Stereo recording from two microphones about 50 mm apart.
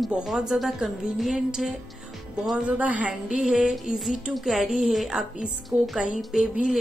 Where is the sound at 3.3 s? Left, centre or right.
Centre.